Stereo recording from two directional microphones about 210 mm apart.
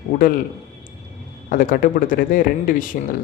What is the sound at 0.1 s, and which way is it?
Speech, 45° left (ahead or behind).